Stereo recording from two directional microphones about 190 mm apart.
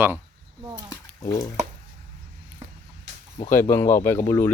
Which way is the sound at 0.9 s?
20° left (ahead or behind).